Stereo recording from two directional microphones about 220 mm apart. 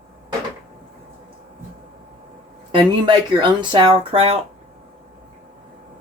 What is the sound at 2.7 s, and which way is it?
Speech, 20° right (ahead or behind).